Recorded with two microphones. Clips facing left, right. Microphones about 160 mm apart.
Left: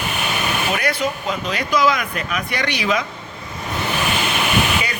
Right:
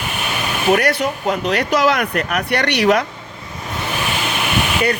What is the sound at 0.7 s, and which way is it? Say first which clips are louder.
Speech: right 9 dB; 65° right (ahead or behind).